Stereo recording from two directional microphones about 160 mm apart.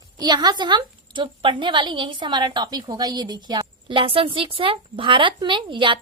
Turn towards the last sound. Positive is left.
turn(degrees=-30)  # may be behind; listen again after turning